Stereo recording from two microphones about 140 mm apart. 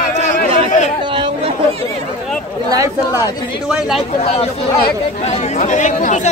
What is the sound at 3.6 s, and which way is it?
Speech, 5° right (ahead or behind).